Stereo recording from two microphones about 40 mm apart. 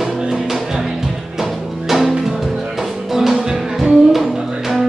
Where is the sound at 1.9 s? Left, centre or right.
Centre.